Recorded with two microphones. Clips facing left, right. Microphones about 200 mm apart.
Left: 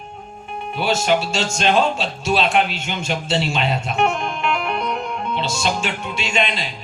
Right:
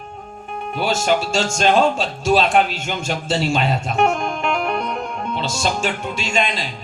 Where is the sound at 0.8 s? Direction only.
45° right (ahead or behind).